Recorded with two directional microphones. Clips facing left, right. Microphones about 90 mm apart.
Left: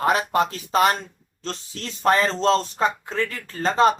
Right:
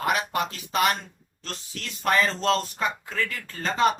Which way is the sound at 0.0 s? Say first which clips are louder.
Left 5 dB; 35° left (ahead or behind).